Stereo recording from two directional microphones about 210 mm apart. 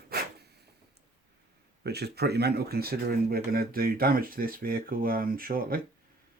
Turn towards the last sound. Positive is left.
turn(degrees=-45)  # may be behind; listen again after turning